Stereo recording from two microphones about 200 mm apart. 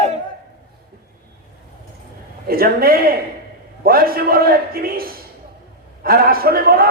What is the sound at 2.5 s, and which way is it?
A man's voice, 50° right (ahead or behind).